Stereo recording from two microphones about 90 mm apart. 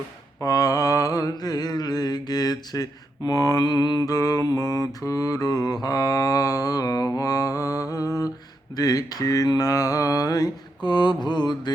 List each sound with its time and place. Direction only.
0.4 s mantra: 45° left (ahead or behind)
10.8 s mantra: 55° left (ahead or behind)